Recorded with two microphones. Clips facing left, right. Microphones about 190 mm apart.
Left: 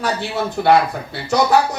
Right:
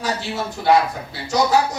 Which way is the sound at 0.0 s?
60° left (ahead or behind).